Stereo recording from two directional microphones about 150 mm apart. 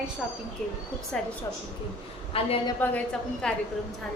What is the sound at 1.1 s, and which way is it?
Speech, 5° left (ahead or behind).